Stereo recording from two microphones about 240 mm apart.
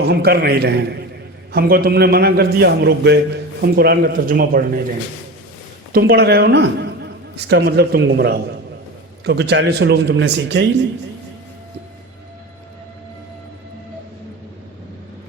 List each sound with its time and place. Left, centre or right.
0.0 s a man's voice: right
5.9 s a man's voice: right